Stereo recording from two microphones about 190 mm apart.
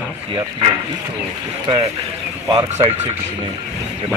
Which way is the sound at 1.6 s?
25° right (ahead or behind).